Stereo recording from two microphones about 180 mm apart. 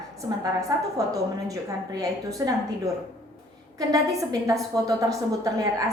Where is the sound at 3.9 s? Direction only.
20° right (ahead or behind).